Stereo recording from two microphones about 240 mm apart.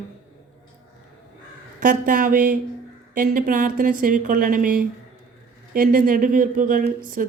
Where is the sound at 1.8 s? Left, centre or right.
Right.